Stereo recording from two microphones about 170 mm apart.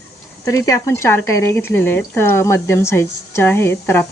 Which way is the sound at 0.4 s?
20° left (ahead or behind).